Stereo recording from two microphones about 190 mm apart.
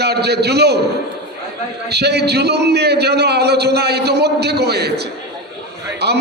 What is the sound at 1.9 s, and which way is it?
A man's voice, 60° right (ahead or behind).